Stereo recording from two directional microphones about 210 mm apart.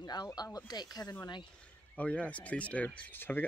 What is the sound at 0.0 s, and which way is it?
Speech, 20° left (ahead or behind).